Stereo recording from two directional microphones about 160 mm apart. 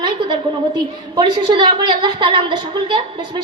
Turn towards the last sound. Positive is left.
turn(degrees=-30)  # may be behind; listen again after turning